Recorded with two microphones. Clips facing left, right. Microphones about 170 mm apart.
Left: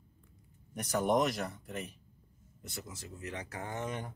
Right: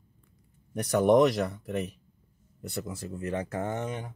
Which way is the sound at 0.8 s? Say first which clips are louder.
Right 8 dB; 65° right (ahead or behind).